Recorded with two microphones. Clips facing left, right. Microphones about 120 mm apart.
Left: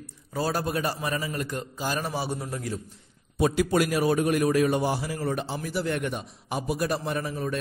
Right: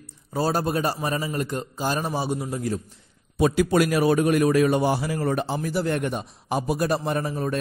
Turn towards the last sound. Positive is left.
turn(degrees=-40)  # may be behind; listen again after turning